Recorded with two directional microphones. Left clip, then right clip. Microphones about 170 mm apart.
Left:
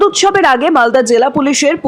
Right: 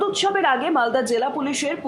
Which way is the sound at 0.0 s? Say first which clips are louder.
Left 10 dB; 40° left (ahead or behind).